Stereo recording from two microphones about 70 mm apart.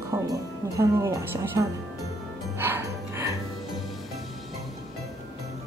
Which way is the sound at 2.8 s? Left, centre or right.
Right.